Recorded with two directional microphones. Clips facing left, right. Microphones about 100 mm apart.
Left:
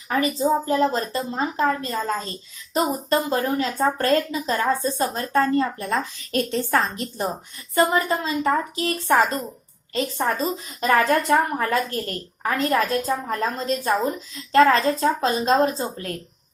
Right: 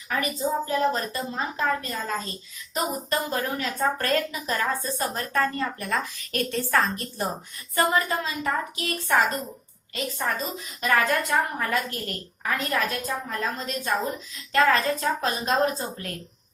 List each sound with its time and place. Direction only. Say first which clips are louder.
0.1 s a woman's voice: left 6 dB; 30° left (ahead or behind)